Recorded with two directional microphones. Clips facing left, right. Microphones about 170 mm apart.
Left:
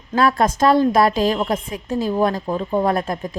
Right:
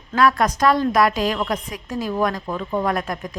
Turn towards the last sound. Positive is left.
turn(degrees=25)  # may be behind; listen again after turning